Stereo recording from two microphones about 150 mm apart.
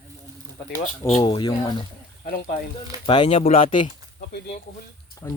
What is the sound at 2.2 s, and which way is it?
Speech, 90° left.